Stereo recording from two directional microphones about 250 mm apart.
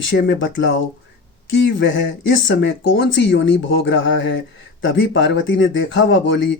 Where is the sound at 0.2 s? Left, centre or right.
Left.